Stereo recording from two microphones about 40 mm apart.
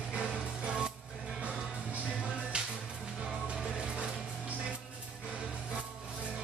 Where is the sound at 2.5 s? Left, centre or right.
Right.